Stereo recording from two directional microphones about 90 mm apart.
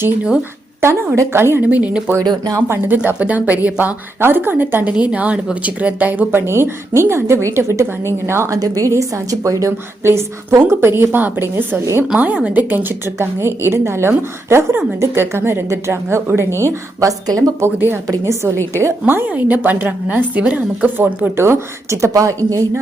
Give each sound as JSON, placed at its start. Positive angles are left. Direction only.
{"t": 0.8, "sound": "a woman's voice", "side_deg": -35}
{"t": 1.7, "sound": "a woman's voice", "side_deg": -15}
{"t": 2.2, "sound": "speech", "side_deg": -45}
{"t": 2.6, "sound": "a woman's voice", "side_deg": -20}
{"t": 8.5, "sound": "a woman's voice", "side_deg": -40}
{"t": 12.1, "sound": "a woman's voice", "side_deg": -15}
{"t": 13.1, "sound": "a woman's voice", "side_deg": -25}
{"t": 17.7, "sound": "a woman's voice", "side_deg": -20}
{"t": 18.1, "sound": "a woman's voice", "side_deg": -35}